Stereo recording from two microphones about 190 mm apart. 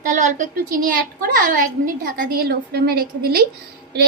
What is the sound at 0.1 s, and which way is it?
A woman's voice, 40° right (ahead or behind).